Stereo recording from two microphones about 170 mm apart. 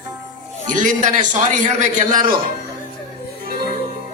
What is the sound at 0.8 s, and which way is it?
Speech, 45° right (ahead or behind).